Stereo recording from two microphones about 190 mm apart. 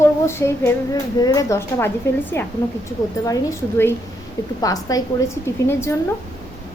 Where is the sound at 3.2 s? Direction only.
15° left (ahead or behind).